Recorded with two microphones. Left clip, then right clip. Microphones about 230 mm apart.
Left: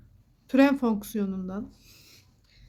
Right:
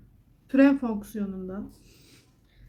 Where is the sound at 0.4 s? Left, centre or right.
Left.